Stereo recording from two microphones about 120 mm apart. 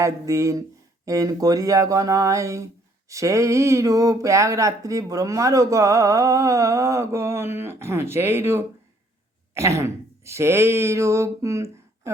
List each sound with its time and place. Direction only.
0.0 s speech: 25° right (ahead or behind)